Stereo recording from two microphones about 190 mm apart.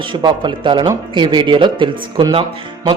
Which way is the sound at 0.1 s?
25° right (ahead or behind).